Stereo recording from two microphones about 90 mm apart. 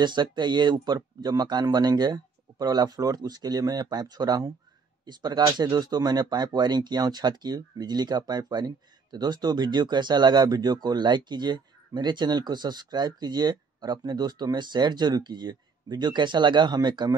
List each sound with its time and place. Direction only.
0.0 s speech: 55° right (ahead or behind)